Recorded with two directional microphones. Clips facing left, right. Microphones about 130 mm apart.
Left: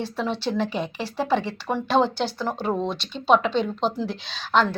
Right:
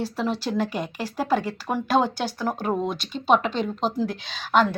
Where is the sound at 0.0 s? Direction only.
10° right (ahead or behind).